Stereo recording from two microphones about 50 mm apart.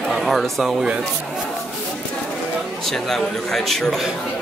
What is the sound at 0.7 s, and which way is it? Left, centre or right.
Speech, centre.